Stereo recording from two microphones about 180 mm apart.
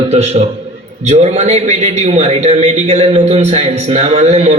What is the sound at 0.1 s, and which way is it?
A man's voice, 35° right (ahead or behind).